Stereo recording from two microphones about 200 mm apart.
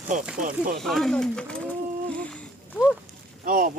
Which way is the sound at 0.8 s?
Centre (ahead or behind).